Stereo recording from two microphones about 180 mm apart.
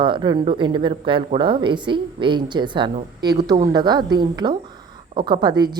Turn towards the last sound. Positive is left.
turn(degrees=-25)  # may be behind; listen again after turning